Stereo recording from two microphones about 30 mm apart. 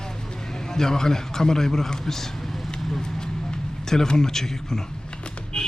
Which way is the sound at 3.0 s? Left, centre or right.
Left.